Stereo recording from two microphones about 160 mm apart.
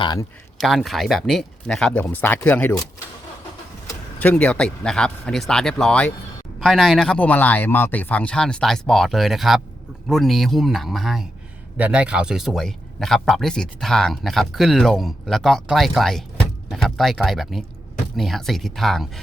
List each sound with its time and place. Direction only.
0.0 s speech: 25° left (ahead or behind)
0.6 s a man's voice: centre (ahead or behind)
4.2 s a man's voice: 10° left (ahead or behind)